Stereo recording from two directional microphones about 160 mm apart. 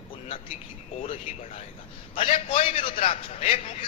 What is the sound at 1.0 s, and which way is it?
A man's voice, 35° left (ahead or behind).